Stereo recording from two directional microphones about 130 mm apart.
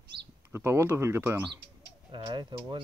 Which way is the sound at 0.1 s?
40° right (ahead or behind).